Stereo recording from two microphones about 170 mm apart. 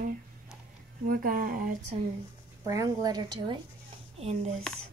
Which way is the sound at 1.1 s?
55° right (ahead or behind).